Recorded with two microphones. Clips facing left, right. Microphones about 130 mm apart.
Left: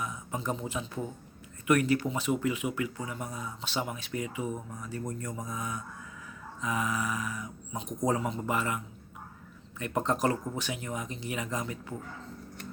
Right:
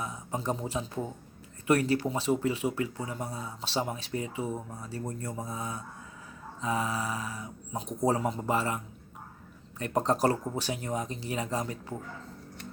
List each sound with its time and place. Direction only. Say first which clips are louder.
0.0 s speech: right 1 dB; 35° right (ahead or behind)